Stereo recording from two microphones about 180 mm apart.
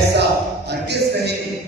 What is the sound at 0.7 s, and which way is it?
Speech, 65° right (ahead or behind).